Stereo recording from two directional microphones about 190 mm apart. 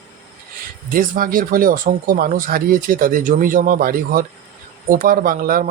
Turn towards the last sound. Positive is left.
turn(degrees=-50)  # may be behind; listen again after turning